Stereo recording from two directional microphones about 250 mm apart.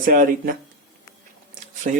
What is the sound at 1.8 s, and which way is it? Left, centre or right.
Speech, right.